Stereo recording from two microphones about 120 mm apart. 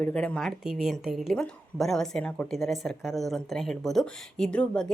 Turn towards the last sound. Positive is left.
turn(degrees=5)  # may be behind; listen again after turning